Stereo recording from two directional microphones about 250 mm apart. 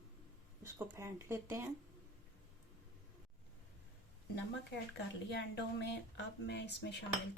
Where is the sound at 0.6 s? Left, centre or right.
Centre.